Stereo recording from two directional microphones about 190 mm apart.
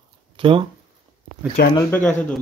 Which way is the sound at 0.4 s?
25° right (ahead or behind).